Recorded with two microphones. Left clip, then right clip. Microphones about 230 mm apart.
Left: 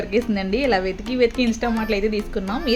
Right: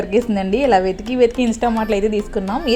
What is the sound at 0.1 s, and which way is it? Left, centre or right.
A woman's voice, centre.